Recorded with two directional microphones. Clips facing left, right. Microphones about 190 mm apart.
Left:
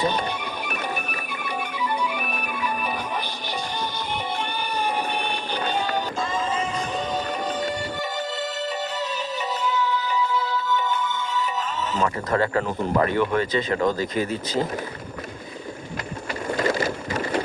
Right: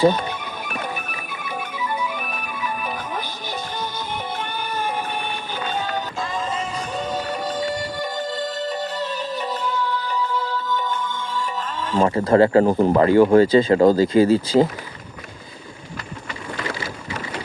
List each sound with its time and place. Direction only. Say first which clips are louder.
1.8 s music: even; centre (ahead or behind)
2.1 s music: left 1 dB; 10° left (ahead or behind)
11.9 s speech: right 8 dB; 30° right (ahead or behind)
16.6 s boat: left 7 dB; 45° left (ahead or behind)